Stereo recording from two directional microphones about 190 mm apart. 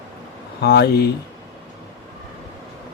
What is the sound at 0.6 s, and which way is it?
Speech, 55° left (ahead or behind).